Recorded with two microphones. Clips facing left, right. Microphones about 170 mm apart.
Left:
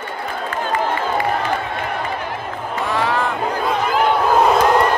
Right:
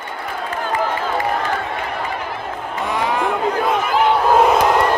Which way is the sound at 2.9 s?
20° right (ahead or behind).